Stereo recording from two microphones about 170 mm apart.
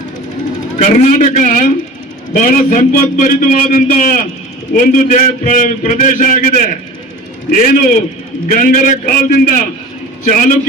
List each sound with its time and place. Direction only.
0.8 s a man's voice: 50° left (ahead or behind)